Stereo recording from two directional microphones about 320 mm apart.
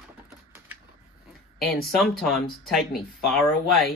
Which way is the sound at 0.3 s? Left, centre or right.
Centre.